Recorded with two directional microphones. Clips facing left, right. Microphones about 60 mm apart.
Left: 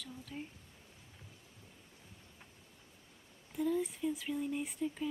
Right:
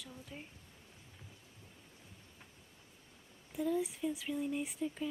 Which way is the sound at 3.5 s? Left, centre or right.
Centre.